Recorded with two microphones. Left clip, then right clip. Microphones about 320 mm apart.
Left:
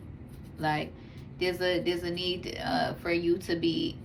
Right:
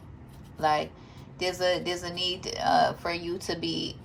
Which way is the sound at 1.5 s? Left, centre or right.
Right.